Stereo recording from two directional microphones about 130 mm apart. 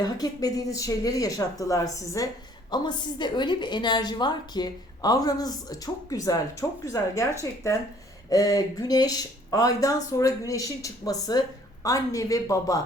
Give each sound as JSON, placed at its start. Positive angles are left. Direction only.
{"t": 0.0, "sound": "speech", "side_deg": 30}